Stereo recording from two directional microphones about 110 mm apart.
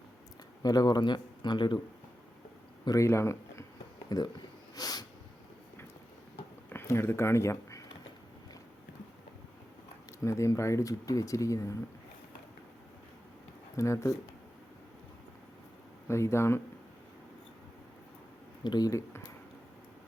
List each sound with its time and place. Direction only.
0.6 s a man's voice: 35° left (ahead or behind)
2.8 s speech: 30° left (ahead or behind)
4.1 s speech: 35° left (ahead or behind)
4.7 s snort: 35° left (ahead or behind)
6.7 s speech: 20° left (ahead or behind)
10.2 s speech: 25° left (ahead or behind)
13.7 s speech: 25° left (ahead or behind)
16.0 s speech: 25° left (ahead or behind)
18.6 s speech: 40° left (ahead or behind)